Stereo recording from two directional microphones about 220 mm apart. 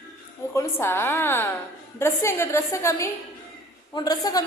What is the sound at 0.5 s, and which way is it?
A woman's voice, 10° left (ahead or behind).